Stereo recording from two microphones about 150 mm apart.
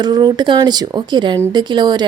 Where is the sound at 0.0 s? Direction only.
30° right (ahead or behind).